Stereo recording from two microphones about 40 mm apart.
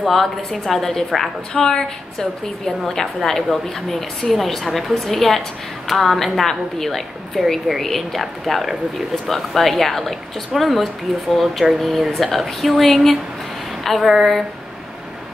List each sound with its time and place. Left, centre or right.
0.0 s a woman's voice: centre